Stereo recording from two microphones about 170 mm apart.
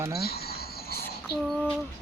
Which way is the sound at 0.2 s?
65° left (ahead or behind).